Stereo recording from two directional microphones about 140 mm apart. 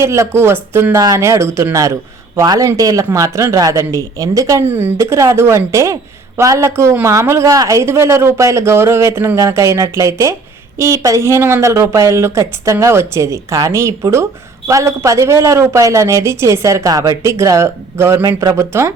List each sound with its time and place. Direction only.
0.0 s speech: 20° right (ahead or behind)